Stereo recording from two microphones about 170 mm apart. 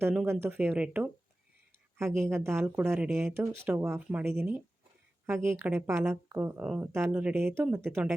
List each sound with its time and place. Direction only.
0.0 s speech: 10° right (ahead or behind)
5.2 s speech: 15° right (ahead or behind)